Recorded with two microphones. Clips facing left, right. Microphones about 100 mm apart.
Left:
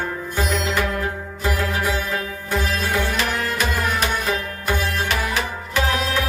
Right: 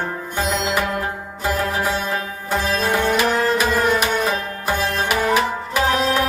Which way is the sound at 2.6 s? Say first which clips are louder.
Right 6 dB; 35° right (ahead or behind).